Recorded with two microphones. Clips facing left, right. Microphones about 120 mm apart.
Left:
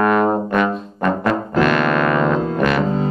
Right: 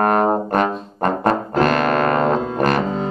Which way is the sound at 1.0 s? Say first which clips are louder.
Right 1 dB; 40° right (ahead or behind).